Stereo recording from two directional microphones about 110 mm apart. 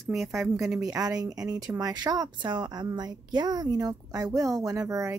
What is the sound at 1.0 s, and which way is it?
A woman's voice, 35° right (ahead or behind).